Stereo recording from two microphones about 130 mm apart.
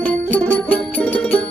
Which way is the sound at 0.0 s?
10° left (ahead or behind).